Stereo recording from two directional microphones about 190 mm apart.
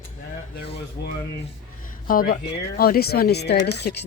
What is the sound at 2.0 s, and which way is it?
Speech, 50° left (ahead or behind).